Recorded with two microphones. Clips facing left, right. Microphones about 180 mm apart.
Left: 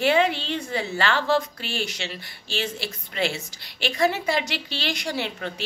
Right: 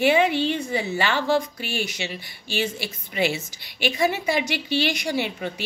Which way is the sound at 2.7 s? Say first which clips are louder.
Right 1 dB; 5° right (ahead or behind).